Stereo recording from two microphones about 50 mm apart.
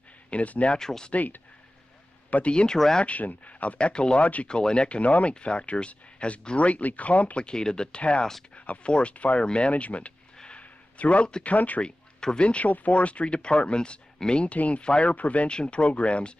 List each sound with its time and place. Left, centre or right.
0.3 s speech: left
0.7 s speech: centre
1.1 s speech: left
2.3 s speech: left
3.0 s speech: left
7.4 s speech: centre
10.3 s sniff: centre
10.6 s a sound: left
11.5 s speech: left
11.8 s speech: centre